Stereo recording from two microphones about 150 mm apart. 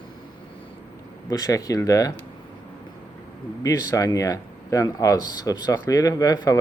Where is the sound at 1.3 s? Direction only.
25° left (ahead or behind).